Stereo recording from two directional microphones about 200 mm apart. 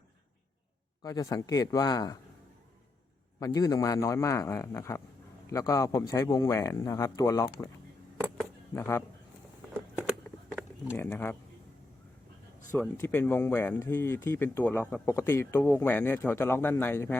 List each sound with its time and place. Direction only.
1.0 s speech: 15° left (ahead or behind)
3.4 s speech: 15° left (ahead or behind)
8.2 s keys jangling: 10° left (ahead or behind)
10.0 s a sound: 10° right (ahead or behind)
10.9 s speech: 10° left (ahead or behind)
13.0 s speech: 10° left (ahead or behind)